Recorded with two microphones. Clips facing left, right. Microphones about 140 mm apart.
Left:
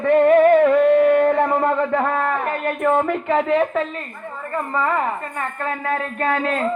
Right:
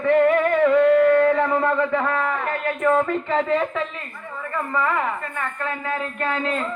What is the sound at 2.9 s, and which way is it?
Speech, 20° left (ahead or behind).